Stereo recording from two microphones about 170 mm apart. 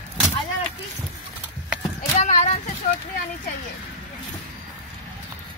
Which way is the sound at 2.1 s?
40° left (ahead or behind).